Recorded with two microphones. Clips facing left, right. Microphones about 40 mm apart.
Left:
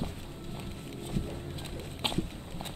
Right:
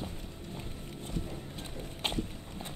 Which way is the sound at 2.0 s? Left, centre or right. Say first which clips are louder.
Left 1 dB; centre.